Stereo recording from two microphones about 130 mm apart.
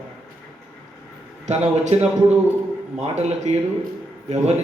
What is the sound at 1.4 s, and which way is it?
A man's voice, 60° right (ahead or behind).